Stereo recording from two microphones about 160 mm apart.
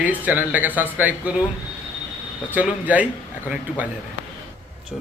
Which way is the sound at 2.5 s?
10° right (ahead or behind).